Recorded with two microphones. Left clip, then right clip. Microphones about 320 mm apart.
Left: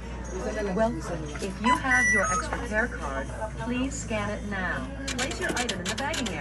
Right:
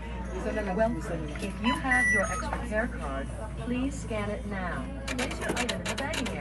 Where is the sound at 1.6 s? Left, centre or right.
Left.